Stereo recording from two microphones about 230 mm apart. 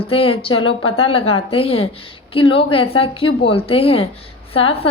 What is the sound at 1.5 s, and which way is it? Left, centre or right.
A woman's voice, left.